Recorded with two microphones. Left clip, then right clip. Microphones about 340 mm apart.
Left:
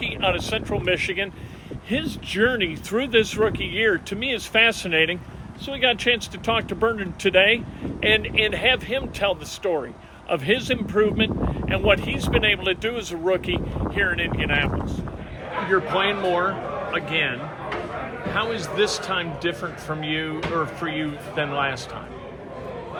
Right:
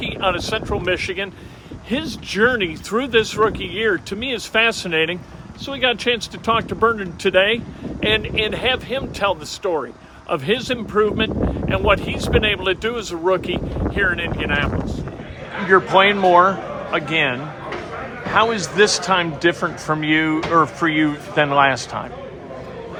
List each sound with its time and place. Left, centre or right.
0.0 s speech: centre
15.7 s a man's voice: centre
18.3 s a man's voice: centre